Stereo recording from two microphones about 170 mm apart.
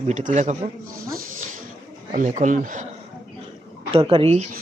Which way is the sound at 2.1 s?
50° right (ahead or behind).